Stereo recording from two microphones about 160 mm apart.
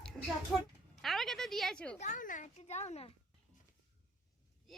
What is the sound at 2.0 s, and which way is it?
Speech, 50° left (ahead or behind).